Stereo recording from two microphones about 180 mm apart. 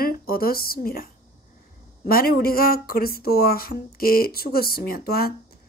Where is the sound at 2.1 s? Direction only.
55° left (ahead or behind).